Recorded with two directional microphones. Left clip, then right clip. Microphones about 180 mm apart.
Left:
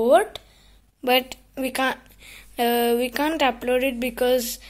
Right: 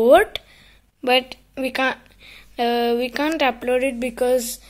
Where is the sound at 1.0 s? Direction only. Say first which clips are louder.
Right 2 dB; centre (ahead or behind).